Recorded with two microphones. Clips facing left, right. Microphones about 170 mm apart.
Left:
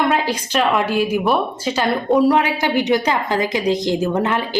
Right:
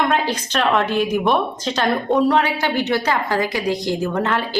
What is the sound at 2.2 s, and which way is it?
A woman's voice, 15° left (ahead or behind).